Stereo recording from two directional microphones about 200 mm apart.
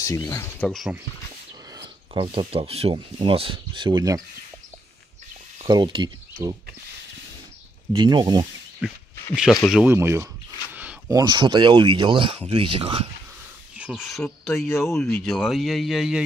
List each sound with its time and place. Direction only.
0.0 s speech: 15° left (ahead or behind)
1.7 s speech: 25° right (ahead or behind)
5.6 s speech: 25° right (ahead or behind)
7.9 s speech: 20° right (ahead or behind)
8.8 s speech: centre (ahead or behind); by 13.1 s 30° right (ahead or behind)
14.0 s speech: centre (ahead or behind)